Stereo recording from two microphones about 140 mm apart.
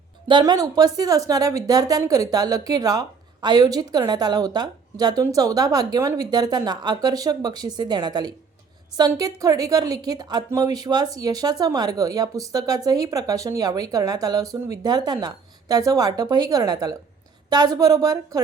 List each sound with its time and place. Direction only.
0.3 s a woman's voice: 30° right (ahead or behind)